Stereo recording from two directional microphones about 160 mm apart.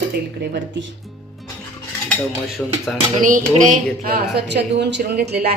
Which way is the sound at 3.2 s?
55° right (ahead or behind).